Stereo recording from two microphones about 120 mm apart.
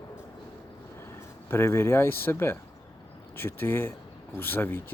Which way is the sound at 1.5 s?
20° left (ahead or behind).